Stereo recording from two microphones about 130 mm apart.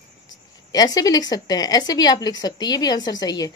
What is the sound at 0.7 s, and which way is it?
A woman's voice, 30° left (ahead or behind).